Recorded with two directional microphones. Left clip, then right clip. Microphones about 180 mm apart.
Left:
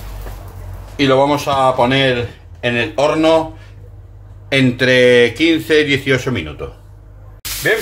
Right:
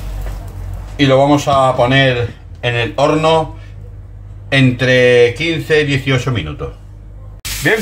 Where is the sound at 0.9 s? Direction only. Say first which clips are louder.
Right 2 dB; 30° left (ahead or behind).